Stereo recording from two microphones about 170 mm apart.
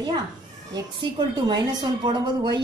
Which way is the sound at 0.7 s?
25° right (ahead or behind).